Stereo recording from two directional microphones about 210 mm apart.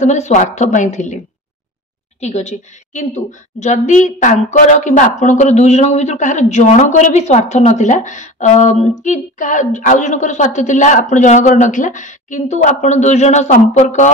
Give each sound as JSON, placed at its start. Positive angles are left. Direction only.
{"t": 0.0, "sound": "a woman's voice", "side_deg": 35}